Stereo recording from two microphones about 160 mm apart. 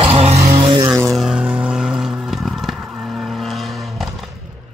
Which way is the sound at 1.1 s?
5° right (ahead or behind).